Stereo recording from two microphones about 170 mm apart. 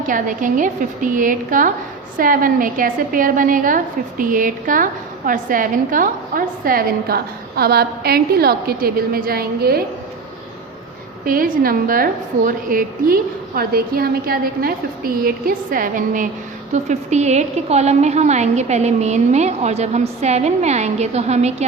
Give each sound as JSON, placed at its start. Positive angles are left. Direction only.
{"t": 0.1, "sound": "a woman's voice", "side_deg": -50}
{"t": 11.3, "sound": "a woman's voice", "side_deg": -55}